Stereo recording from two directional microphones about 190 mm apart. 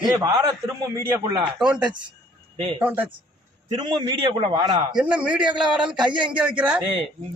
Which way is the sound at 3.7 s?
25° right (ahead or behind).